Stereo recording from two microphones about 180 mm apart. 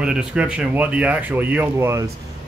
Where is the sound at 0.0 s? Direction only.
5° right (ahead or behind).